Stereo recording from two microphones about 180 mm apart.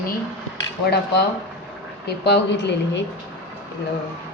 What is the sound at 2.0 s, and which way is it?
Speech, 65° left (ahead or behind).